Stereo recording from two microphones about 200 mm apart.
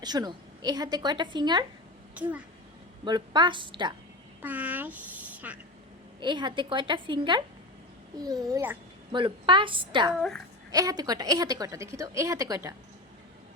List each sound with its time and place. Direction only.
0.0 s a woman's voice: 20° right (ahead or behind)
2.1 s a child's voice: 5° right (ahead or behind)
3.0 s a woman's voice: 20° right (ahead or behind)
4.4 s a woman's voice: 10° right (ahead or behind)
6.1 s a woman's voice: 20° right (ahead or behind)
9.1 s a woman's voice: 25° right (ahead or behind)